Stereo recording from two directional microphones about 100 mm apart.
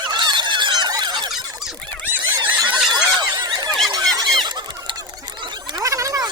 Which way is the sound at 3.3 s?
45° right (ahead or behind).